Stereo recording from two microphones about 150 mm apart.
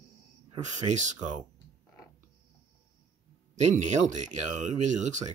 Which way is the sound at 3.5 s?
50° right (ahead or behind).